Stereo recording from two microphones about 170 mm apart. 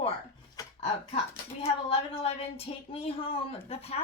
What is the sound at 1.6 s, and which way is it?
Speech, 35° left (ahead or behind).